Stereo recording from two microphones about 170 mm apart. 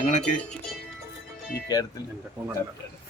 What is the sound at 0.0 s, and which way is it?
Speech, 45° left (ahead or behind).